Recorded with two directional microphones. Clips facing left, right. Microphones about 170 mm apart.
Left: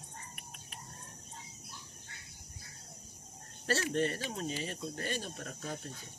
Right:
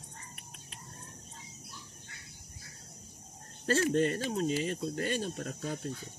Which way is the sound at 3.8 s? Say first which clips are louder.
Right 6 dB; 35° right (ahead or behind).